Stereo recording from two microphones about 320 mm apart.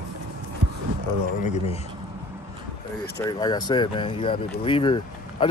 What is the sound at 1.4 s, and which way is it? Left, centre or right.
Speech, centre.